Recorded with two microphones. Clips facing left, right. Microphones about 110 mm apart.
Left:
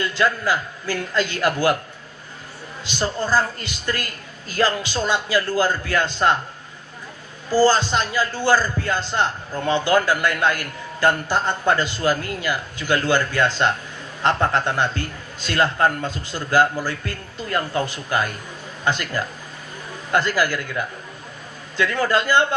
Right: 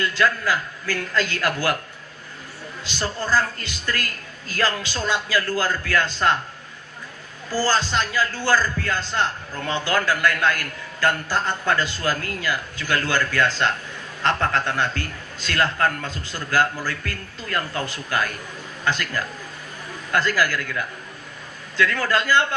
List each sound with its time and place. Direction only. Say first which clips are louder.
0.0 s a man's voice: left 1 dB; 20° left (ahead or behind)
2.8 s a man's voice: left 3 dB; 20° left (ahead or behind)
7.5 s a man's voice: left 5 dB; 20° left (ahead or behind)